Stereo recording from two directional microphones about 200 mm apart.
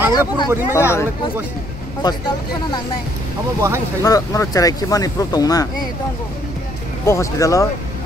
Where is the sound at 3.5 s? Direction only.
15° right (ahead or behind).